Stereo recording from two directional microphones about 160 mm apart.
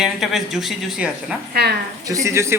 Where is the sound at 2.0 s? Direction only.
20° right (ahead or behind).